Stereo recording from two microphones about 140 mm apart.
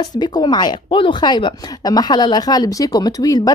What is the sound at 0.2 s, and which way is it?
Speech, 35° left (ahead or behind).